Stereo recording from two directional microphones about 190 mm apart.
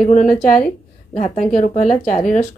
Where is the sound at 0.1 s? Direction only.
40° left (ahead or behind).